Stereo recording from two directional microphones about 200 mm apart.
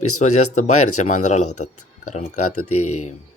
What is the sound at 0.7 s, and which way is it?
Speech, 90° left.